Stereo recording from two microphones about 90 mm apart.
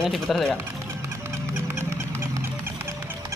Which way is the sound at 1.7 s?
30° right (ahead or behind).